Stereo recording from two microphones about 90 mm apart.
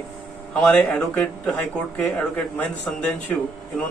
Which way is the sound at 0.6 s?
10° left (ahead or behind).